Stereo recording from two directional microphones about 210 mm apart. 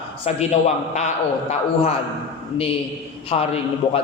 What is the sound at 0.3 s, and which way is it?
A man's voice, 30° left (ahead or behind).